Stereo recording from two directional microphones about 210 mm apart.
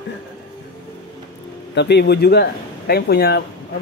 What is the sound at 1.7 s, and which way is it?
Speech, 55° left (ahead or behind).